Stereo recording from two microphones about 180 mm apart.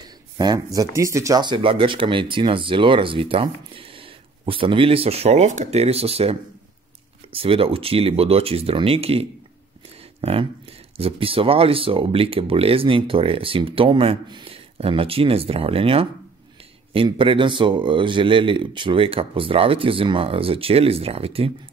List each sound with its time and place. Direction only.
0.4 s speech: 20° right (ahead or behind)
7.3 s speech: 30° right (ahead or behind)
11.0 s speech: 30° right (ahead or behind)